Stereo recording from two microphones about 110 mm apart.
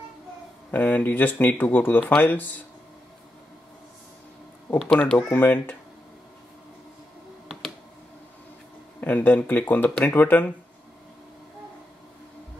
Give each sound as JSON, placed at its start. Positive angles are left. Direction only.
{"t": 0.7, "sound": "speech", "side_deg": 15}
{"t": 4.7, "sound": "speech", "side_deg": 5}
{"t": 9.0, "sound": "speech", "side_deg": 15}